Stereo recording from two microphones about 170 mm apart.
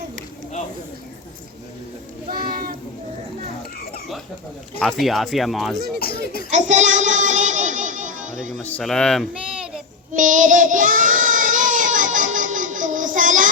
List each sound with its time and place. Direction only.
2.3 s a sound: 60° right (ahead or behind)
4.8 s speech: centre (ahead or behind)
6.0 s speech: 60° left (ahead or behind)
6.5 s child singing: 45° right (ahead or behind)
8.6 s speech: 5° left (ahead or behind)
10.2 s child singing: 50° right (ahead or behind)